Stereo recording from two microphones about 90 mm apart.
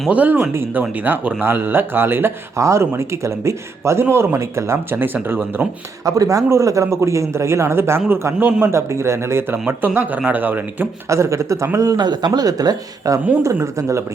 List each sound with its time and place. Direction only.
0.1 s speech: 15° right (ahead or behind)
6.1 s a man's voice: 40° right (ahead or behind); by 8.6 s 20° right (ahead or behind)
8.6 s speech: 30° right (ahead or behind)
11.1 s a man's voice: 35° right (ahead or behind)